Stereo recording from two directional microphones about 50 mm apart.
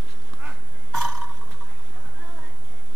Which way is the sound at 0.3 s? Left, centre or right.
Right.